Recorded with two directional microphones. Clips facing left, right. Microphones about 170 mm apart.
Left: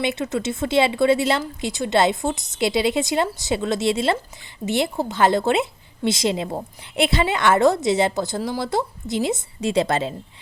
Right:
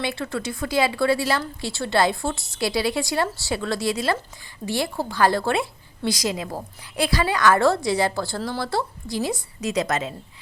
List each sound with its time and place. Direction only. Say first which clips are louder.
0.0 s a woman's voice: left 4 dB; 20° left (ahead or behind)